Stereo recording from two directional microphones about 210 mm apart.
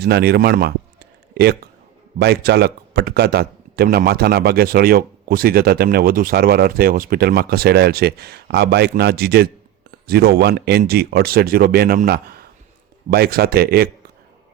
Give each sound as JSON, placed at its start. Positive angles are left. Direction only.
{"t": 0.0, "sound": "a man's voice", "side_deg": -50}